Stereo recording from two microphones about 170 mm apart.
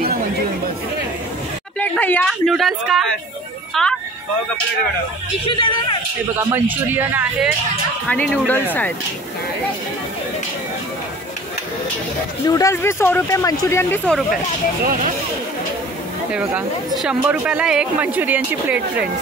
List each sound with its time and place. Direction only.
1.8 s speech: 10° left (ahead or behind)
6.5 s speech: 10° right (ahead or behind)
8.1 s speech: 10° left (ahead or behind)
12.4 s speech: 20° left (ahead or behind)
16.3 s speech: 5° right (ahead or behind)